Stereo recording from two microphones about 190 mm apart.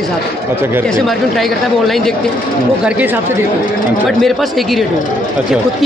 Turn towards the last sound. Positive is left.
turn(degrees=0)  # may be behind; listen again after turning